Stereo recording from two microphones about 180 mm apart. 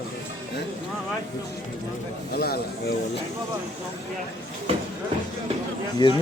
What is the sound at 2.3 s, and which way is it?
Speech, 60° left (ahead or behind).